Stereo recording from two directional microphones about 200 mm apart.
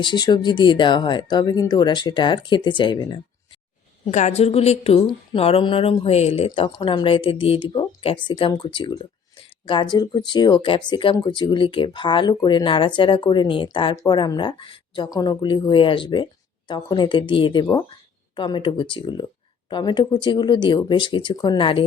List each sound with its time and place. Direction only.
0.0 s a woman's voice: 25° left (ahead or behind)
4.0 s a woman's voice: 35° left (ahead or behind)